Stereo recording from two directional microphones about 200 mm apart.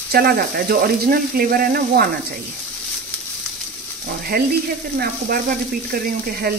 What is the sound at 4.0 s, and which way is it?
Speech, 50° right (ahead or behind).